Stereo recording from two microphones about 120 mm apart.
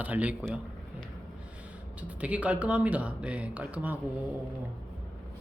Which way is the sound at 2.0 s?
10° right (ahead or behind).